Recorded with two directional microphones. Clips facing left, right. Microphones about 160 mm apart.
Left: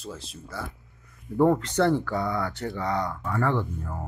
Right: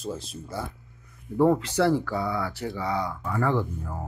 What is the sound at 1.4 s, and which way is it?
Speech, 5° right (ahead or behind).